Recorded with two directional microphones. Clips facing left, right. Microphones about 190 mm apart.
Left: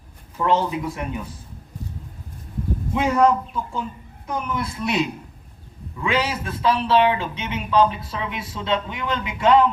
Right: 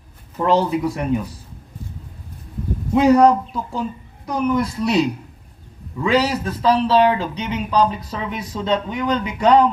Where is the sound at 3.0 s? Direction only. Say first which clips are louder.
Right 6 dB; 40° right (ahead or behind).